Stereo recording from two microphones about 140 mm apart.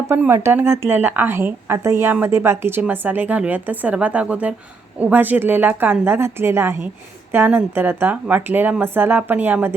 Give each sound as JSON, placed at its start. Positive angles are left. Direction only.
{"t": 0.1, "sound": "a woman's voice", "side_deg": -15}